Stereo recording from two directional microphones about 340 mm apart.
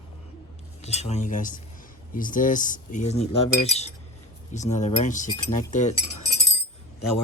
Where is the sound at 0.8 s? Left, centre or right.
Centre.